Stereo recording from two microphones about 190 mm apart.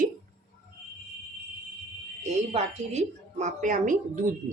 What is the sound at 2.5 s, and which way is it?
A woman's voice, 35° right (ahead or behind).